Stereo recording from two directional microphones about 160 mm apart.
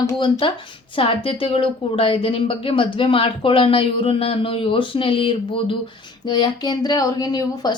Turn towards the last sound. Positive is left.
turn(degrees=25)  # may be behind; listen again after turning